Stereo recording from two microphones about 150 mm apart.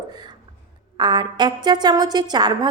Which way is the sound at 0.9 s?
30° right (ahead or behind).